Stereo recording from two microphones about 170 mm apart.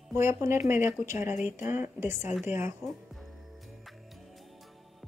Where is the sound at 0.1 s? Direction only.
15° right (ahead or behind).